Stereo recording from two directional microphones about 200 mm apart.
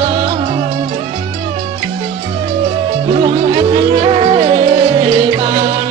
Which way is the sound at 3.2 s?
25° right (ahead or behind).